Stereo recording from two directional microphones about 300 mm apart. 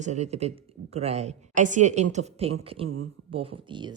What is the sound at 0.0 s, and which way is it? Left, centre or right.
A woman's voice, right.